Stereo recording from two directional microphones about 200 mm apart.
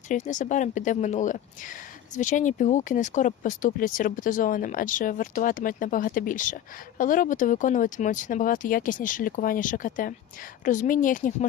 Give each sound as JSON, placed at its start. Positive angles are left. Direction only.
{"t": 0.1, "sound": "speech", "side_deg": 40}